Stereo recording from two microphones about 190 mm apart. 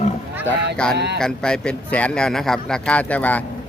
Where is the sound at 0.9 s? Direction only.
60° right (ahead or behind).